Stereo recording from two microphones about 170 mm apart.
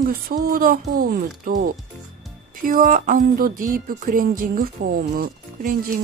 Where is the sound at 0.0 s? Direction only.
60° right (ahead or behind).